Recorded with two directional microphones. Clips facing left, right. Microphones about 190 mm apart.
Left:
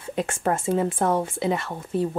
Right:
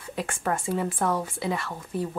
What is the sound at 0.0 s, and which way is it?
Speech, 25° left (ahead or behind).